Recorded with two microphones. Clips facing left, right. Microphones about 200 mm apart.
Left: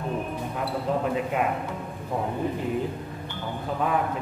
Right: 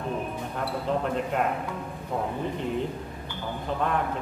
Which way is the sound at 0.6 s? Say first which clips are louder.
Left 1 dB; 5° left (ahead or behind).